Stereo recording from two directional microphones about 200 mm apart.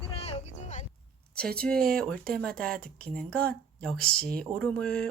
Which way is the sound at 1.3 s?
5° left (ahead or behind).